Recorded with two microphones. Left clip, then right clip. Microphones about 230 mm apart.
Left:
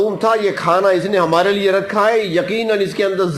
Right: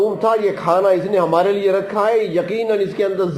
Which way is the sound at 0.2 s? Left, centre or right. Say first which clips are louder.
Left 1 dB; left.